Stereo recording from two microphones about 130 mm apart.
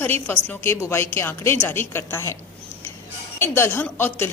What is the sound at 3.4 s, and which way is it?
Speech, 15° left (ahead or behind).